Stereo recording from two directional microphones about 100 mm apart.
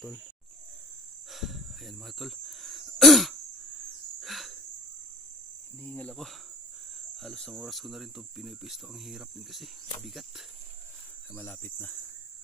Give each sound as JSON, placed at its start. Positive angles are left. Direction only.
{"t": 1.3, "sound": "wheeze", "side_deg": 0}
{"t": 5.8, "sound": "speech", "side_deg": 10}
{"t": 11.3, "sound": "cricket", "side_deg": 15}